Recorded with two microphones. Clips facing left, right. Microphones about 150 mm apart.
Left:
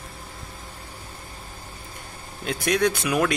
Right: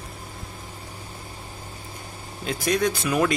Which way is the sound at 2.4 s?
Centre (ahead or behind).